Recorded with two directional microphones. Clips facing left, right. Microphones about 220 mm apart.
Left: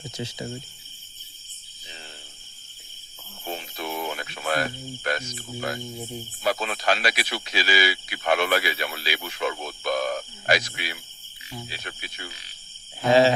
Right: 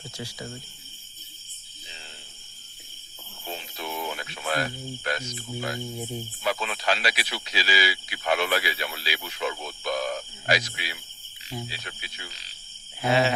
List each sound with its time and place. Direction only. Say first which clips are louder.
0.0 s speech: left 4 dB; 20° left (ahead or behind)
3.5 s a sound: left 3 dB; 50° left (ahead or behind)
5.0 s speech: left 3 dB; 50° left (ahead or behind)
6.0 s speech: right 1 dB; 10° right (ahead or behind)
6.4 s speech: left 3 dB; 40° left (ahead or behind)
13.1 s speech: left 5 dB; 35° left (ahead or behind)